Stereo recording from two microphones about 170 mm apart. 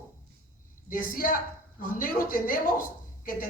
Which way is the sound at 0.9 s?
55° left (ahead or behind).